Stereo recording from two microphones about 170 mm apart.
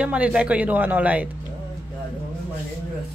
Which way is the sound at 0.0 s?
5° right (ahead or behind).